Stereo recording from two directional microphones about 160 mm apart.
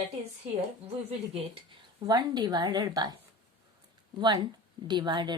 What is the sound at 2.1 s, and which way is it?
Speech, 25° right (ahead or behind).